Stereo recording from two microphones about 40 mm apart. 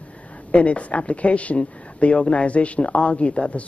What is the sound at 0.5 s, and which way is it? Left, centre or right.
Speech, left.